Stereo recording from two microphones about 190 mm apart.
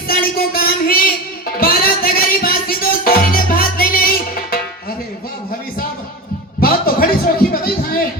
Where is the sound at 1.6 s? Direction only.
50° left (ahead or behind).